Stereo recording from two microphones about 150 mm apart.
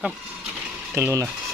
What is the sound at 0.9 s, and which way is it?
Speech, 15° right (ahead or behind).